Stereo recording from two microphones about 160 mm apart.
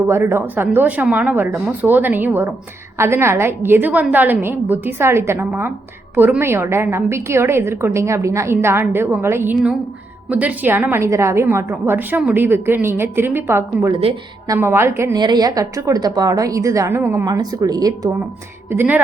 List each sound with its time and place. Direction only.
0.1 s a woman's voice: 15° right (ahead or behind)
18.7 s a woman's voice: 10° right (ahead or behind)